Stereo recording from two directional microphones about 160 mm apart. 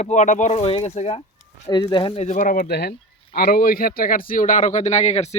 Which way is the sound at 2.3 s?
55° left (ahead or behind).